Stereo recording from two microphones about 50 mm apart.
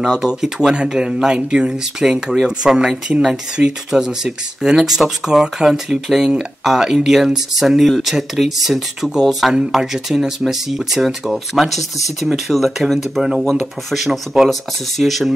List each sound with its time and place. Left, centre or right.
0.1 s speech: centre